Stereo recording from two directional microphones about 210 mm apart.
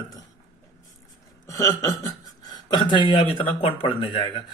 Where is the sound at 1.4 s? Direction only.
15° left (ahead or behind).